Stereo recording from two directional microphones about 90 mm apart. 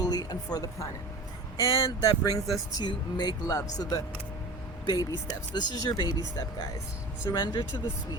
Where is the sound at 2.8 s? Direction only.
50° left (ahead or behind).